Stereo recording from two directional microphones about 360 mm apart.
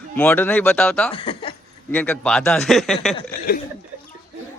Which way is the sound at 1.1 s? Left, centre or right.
Centre.